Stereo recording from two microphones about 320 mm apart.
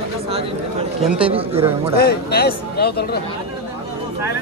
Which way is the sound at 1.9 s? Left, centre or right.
Left.